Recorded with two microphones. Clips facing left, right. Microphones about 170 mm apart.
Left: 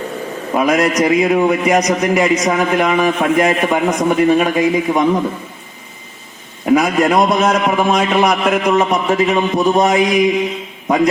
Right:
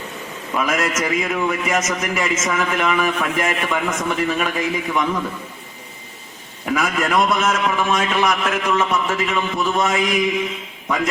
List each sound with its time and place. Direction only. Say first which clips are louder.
0.5 s a man's voice: left 7 dB; 35° left (ahead or behind)
6.7 s a man's voice: left 6 dB; 35° left (ahead or behind)